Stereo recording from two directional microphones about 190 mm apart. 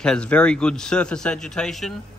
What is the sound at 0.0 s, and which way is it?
A man's voice, 5° left (ahead or behind).